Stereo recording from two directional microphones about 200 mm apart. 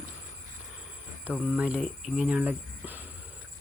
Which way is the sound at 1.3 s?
5° right (ahead or behind).